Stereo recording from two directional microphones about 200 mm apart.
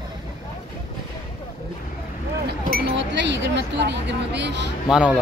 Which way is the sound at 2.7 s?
60° right (ahead or behind).